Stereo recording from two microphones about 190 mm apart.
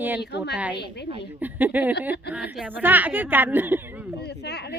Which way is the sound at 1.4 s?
10° right (ahead or behind).